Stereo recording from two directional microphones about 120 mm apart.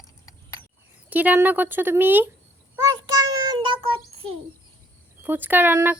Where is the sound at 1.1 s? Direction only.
15° right (ahead or behind).